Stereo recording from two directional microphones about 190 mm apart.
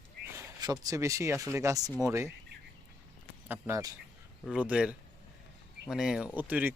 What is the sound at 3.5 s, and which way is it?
Speech, 15° right (ahead or behind).